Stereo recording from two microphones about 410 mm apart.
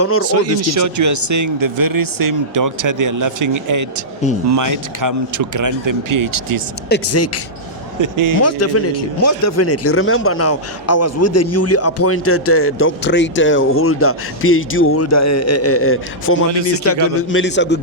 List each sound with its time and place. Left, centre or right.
0.0 s speech: left
0.3 s speech: right
6.9 s speech: left
8.0 s speech: right
8.4 s speech: left